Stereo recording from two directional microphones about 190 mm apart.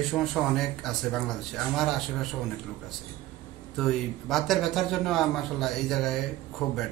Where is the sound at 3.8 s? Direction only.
Centre (ahead or behind).